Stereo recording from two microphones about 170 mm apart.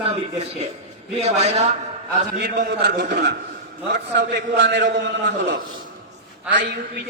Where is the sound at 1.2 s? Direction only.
40° right (ahead or behind).